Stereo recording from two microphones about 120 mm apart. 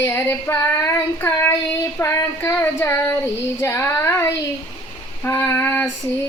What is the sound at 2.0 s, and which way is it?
Child singing, 20° left (ahead or behind).